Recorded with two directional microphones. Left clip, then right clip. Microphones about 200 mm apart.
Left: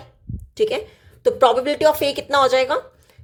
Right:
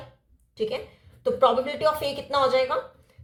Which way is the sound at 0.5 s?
55° left (ahead or behind).